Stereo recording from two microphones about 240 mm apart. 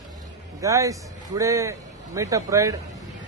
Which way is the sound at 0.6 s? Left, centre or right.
Centre.